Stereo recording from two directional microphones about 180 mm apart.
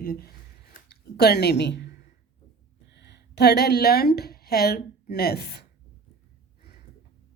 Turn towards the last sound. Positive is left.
turn(degrees=65)  # may be behind; listen again after turning